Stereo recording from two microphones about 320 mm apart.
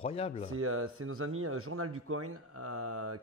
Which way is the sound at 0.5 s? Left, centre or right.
Right.